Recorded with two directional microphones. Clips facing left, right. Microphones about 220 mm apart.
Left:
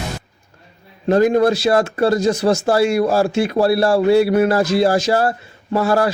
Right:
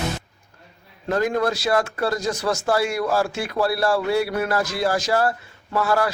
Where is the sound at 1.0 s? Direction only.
25° left (ahead or behind).